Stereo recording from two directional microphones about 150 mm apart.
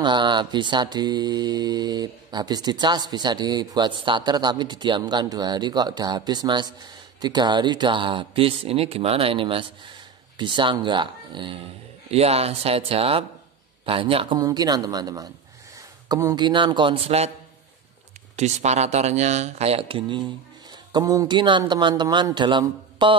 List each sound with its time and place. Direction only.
0.0 s mantra: 30° right (ahead or behind)
10.3 s speech: 30° right (ahead or behind)
14.4 s mantra: 25° right (ahead or behind)
16.1 s speech: 25° right (ahead or behind); by 17.3 s 40° right (ahead or behind)
18.3 s a man's voice: 50° right (ahead or behind); by 23.1 s 30° right (ahead or behind)